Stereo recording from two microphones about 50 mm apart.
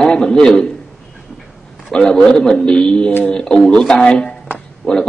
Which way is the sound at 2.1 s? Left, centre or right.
Centre.